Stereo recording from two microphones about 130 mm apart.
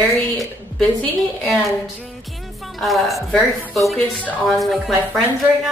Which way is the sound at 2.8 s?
Centre (ahead or behind).